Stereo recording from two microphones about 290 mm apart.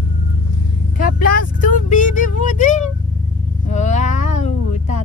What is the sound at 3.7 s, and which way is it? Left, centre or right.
Cat, left.